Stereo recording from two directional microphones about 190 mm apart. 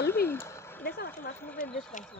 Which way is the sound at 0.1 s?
10° left (ahead or behind).